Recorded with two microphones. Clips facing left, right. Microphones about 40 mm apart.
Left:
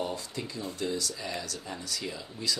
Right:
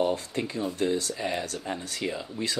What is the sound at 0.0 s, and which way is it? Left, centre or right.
Speech, right.